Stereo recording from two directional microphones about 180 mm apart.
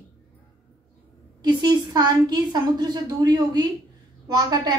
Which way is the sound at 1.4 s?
25° right (ahead or behind).